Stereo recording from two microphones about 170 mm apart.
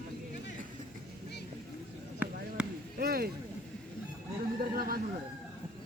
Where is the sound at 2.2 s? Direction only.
10° right (ahead or behind).